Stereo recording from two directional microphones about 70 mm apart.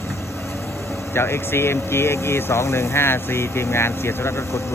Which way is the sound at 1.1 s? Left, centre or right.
Left.